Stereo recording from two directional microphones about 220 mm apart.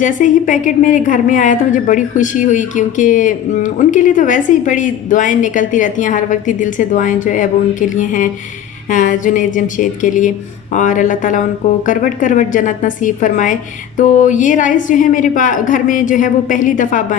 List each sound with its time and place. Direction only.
0.0 s a woman's voice: 35° left (ahead or behind)